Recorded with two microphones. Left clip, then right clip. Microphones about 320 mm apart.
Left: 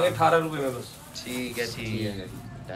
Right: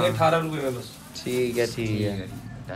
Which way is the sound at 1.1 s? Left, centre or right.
Centre.